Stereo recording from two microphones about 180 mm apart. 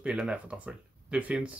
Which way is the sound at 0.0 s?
5° right (ahead or behind).